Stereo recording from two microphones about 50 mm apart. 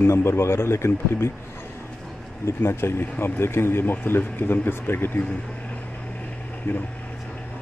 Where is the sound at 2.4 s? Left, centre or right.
Left.